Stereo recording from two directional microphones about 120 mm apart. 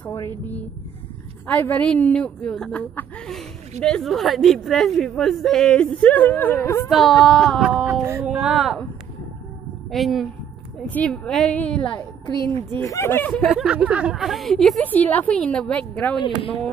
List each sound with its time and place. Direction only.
1.6 s a woman's voice: 10° left (ahead or behind)
6.9 s a woman's voice: centre (ahead or behind)
7.6 s a sound: 10° right (ahead or behind)
7.9 s music: 20° right (ahead or behind)
8.3 s a woman's voice: 5° right (ahead or behind)
9.8 s a woman's voice: centre (ahead or behind)
12.8 s speech: 25° left (ahead or behind)
13.3 s a woman's voice: centre (ahead or behind)
14.8 s a woman's voice: 15° left (ahead or behind)